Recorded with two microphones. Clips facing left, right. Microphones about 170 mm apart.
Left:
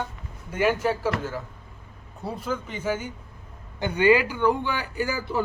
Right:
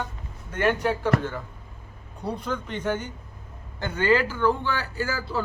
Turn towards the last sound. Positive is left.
turn(degrees=15)  # may be behind; listen again after turning